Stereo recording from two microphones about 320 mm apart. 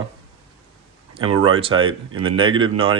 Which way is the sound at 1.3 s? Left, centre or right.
Right.